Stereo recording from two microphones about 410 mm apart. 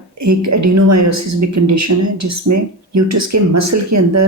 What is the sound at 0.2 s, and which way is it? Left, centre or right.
Speech, right.